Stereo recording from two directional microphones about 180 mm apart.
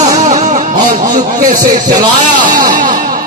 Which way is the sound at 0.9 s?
45° right (ahead or behind).